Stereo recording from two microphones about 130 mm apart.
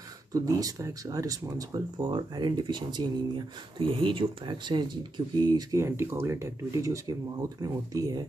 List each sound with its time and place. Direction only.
0.3 s speech: 30° right (ahead or behind)